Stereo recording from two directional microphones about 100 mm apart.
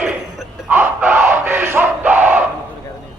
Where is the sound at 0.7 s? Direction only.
20° right (ahead or behind).